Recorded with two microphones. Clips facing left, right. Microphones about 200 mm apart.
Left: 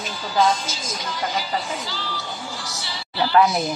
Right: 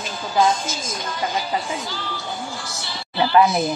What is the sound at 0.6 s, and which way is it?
Speech, 50° right (ahead or behind).